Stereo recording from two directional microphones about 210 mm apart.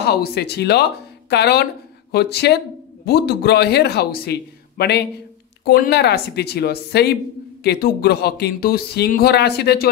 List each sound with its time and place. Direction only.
0.0 s speech: 50° left (ahead or behind)